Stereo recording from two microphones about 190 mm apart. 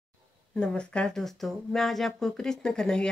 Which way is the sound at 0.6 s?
5° left (ahead or behind).